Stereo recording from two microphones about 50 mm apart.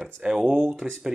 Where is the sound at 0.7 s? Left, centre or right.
Centre.